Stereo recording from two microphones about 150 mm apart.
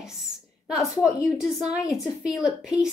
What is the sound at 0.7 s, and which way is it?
A woman's voice, 5° right (ahead or behind).